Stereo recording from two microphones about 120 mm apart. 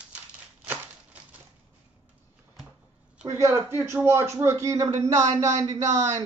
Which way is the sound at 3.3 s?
20° right (ahead or behind).